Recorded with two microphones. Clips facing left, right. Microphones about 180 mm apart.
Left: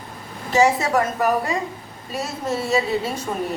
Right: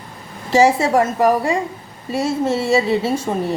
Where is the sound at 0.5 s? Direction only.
30° right (ahead or behind).